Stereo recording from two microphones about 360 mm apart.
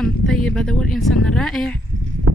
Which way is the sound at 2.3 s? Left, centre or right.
Right.